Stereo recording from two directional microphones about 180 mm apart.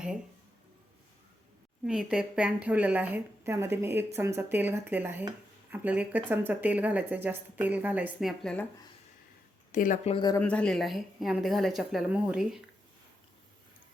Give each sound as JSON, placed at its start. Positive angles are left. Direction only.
{"t": 1.8, "sound": "a woman's voice", "side_deg": -5}
{"t": 9.7, "sound": "a woman's voice", "side_deg": 45}
{"t": 10.2, "sound": "speech", "side_deg": 20}
{"t": 10.4, "sound": "a woman's voice", "side_deg": 5}